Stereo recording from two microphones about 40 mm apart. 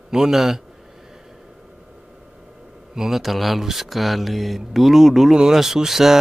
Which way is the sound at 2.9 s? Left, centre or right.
Centre.